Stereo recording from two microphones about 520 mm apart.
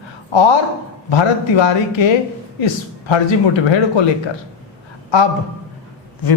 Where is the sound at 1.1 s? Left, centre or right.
Left.